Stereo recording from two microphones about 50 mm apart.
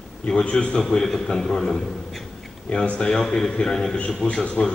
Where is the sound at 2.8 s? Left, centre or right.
Left.